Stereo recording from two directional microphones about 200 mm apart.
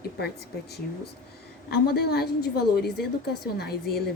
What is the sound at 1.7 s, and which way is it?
A woman's voice, 50° left (ahead or behind).